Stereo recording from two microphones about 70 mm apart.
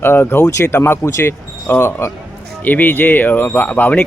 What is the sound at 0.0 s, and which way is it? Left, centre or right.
Speech, left.